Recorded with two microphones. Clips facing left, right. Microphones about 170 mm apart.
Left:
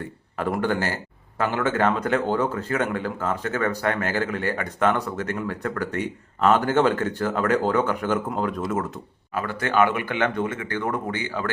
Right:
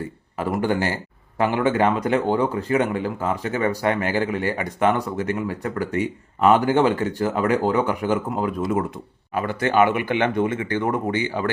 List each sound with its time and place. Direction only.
0.3 s speech: 10° right (ahead or behind)